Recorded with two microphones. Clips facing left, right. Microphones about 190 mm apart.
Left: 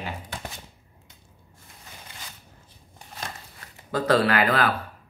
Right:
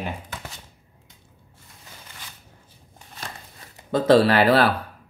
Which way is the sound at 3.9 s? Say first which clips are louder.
Right 5 dB; 25° right (ahead or behind).